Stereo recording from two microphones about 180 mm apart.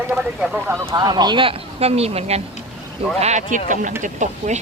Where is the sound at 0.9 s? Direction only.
25° right (ahead or behind); by 4.6 s 40° right (ahead or behind).